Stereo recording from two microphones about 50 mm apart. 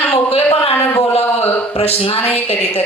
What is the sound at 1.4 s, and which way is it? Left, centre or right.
Speech, left.